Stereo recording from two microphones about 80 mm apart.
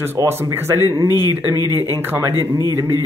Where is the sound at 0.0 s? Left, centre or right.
Right.